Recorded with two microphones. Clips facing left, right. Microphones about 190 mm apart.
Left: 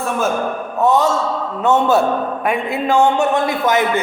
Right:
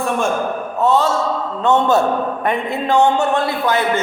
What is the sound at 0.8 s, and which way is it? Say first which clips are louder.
Speech: left 1 dB; 15° left (ahead or behind).